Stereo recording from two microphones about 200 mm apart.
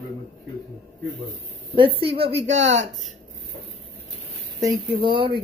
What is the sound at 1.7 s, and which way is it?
Speech, 25° right (ahead or behind).